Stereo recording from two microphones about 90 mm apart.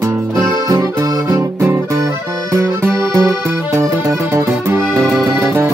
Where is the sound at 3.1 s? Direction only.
35° right (ahead or behind).